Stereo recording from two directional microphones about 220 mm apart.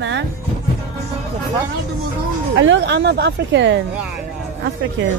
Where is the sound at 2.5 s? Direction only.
55° right (ahead or behind).